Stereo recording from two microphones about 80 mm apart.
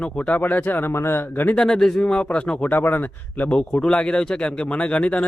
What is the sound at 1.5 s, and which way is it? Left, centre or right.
A man's voice, centre.